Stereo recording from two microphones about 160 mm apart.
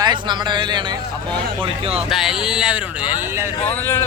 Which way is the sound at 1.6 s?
40° right (ahead or behind).